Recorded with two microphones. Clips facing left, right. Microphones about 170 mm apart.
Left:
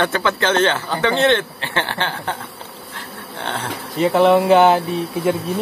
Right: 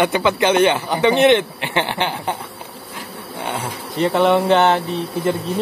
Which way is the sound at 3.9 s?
Centre (ahead or behind).